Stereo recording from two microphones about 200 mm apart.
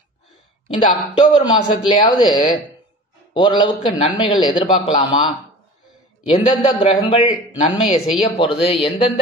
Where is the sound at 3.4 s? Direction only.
25° left (ahead or behind).